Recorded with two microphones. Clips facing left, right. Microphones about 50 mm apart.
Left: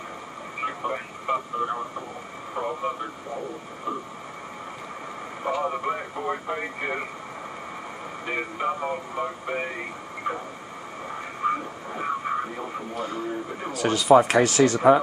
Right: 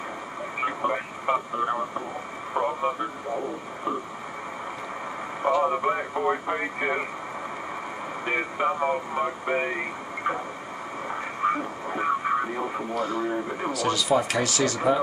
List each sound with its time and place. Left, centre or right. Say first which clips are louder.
0.6 s speech: right 2 dB; centre
5.5 s speech: right 3 dB; centre
8.3 s speech: right 2 dB; centre
10.3 s a sound: right 2 dB; right
11.4 s radio: right 1 dB; centre
13.7 s speech: left 6 dB; left